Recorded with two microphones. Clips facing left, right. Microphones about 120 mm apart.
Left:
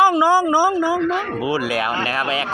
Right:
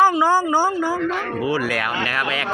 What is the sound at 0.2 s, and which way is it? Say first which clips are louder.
A man's voice: left 2 dB; 5° left (ahead or behind).